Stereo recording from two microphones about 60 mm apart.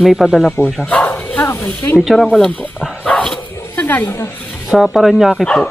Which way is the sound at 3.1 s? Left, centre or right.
Left.